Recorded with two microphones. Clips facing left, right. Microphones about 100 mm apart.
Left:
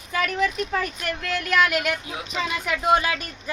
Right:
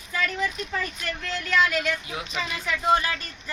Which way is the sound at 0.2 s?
65° left (ahead or behind).